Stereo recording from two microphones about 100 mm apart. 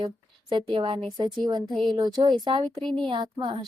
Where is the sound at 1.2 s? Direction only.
45° right (ahead or behind).